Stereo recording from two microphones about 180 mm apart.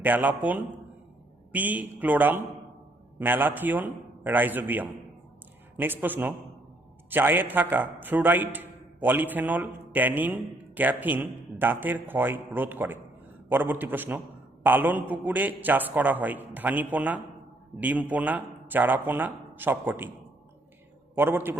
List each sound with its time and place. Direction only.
0.0 s a man's voice: 10° right (ahead or behind)
21.2 s a man's voice: 10° right (ahead or behind)